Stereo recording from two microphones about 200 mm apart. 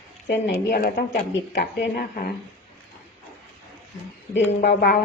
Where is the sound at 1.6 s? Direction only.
55° left (ahead or behind).